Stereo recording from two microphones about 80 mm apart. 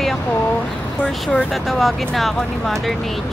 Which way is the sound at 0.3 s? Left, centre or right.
Left.